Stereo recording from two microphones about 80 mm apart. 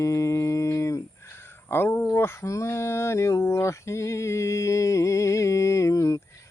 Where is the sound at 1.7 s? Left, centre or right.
Left.